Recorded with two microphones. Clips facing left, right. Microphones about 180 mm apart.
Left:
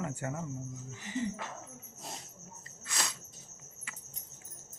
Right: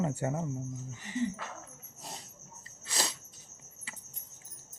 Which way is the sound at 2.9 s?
30° right (ahead or behind).